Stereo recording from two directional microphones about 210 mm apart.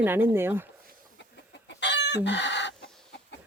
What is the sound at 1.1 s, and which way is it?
Chicken, 55° left (ahead or behind).